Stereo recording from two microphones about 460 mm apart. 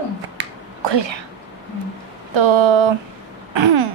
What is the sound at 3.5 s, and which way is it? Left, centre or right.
Throat clearing, right.